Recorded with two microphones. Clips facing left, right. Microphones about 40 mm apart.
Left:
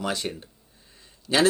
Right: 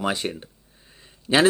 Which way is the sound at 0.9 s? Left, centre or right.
Right.